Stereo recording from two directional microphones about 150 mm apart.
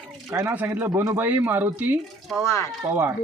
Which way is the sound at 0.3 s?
15° right (ahead or behind).